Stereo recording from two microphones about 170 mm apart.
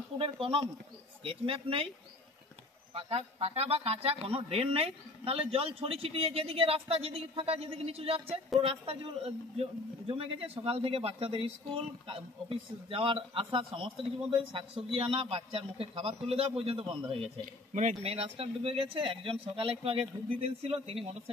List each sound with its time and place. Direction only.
0.2 s a man's voice: 30° right (ahead or behind)
2.9 s a man's voice: 35° right (ahead or behind)